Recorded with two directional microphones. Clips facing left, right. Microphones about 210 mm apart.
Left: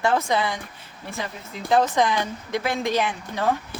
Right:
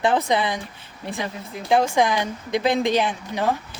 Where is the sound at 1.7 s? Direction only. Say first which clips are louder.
Right 1 dB; 10° right (ahead or behind).